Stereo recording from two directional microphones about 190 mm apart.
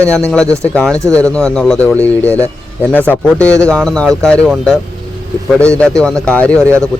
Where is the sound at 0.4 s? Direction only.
15° right (ahead or behind).